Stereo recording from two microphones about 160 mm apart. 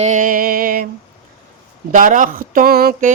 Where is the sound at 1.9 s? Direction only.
55° right (ahead or behind).